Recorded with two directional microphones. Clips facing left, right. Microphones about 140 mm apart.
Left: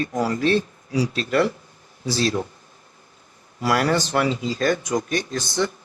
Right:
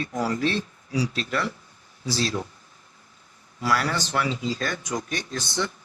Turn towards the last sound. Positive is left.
turn(degrees=40)  # may be behind; listen again after turning